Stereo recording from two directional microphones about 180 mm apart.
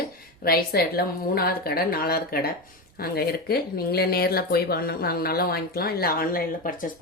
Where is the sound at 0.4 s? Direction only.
55° left (ahead or behind).